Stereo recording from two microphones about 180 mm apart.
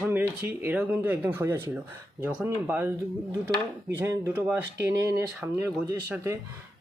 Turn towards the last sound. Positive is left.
turn(degrees=-15)  # may be behind; listen again after turning